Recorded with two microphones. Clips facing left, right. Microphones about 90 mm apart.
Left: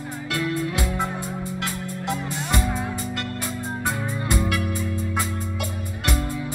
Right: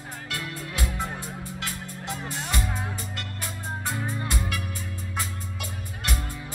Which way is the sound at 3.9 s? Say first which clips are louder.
Left 5 dB; 65° left (ahead or behind).